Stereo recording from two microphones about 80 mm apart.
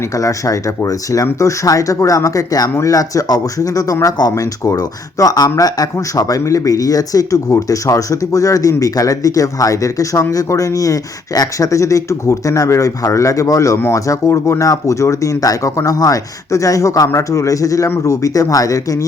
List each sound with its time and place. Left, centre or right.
0.2 s speech: left